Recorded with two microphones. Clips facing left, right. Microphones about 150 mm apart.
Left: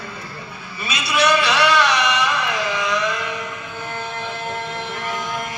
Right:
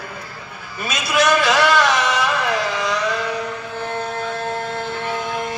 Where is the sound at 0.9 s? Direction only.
45° right (ahead or behind).